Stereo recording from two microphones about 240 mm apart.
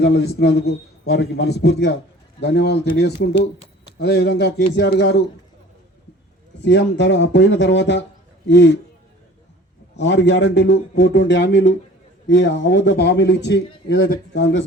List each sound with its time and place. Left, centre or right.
0.0 s a man's voice: left
6.6 s a man's voice: left
10.0 s a man's voice: left